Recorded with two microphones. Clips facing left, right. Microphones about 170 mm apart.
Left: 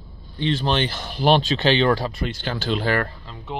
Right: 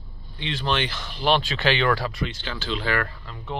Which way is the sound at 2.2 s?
45° left (ahead or behind).